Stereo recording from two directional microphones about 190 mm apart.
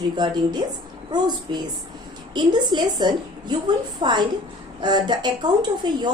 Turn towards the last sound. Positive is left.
turn(degrees=-25)  # may be behind; listen again after turning